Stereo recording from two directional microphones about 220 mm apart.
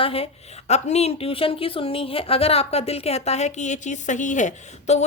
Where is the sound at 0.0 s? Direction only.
25° left (ahead or behind).